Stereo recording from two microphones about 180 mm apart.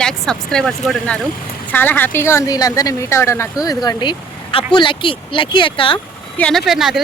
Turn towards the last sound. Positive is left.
turn(degrees=0)  # may be behind; listen again after turning